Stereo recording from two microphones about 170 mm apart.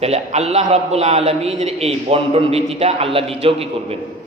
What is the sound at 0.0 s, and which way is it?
A man's voice, 40° right (ahead or behind).